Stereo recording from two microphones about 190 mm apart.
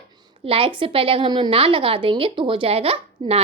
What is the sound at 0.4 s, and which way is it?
A woman's voice, 30° right (ahead or behind).